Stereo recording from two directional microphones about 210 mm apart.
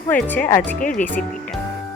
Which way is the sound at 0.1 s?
5° left (ahead or behind).